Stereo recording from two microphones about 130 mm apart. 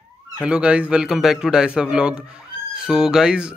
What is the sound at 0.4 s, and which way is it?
A man's voice, 10° right (ahead or behind).